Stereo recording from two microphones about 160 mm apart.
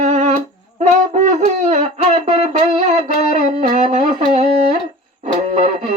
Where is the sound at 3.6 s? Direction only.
55° right (ahead or behind).